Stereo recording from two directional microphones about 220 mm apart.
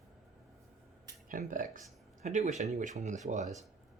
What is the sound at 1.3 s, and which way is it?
Speech, 35° right (ahead or behind).